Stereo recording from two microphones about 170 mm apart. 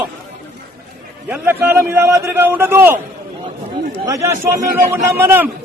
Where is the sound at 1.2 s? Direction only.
10° right (ahead or behind).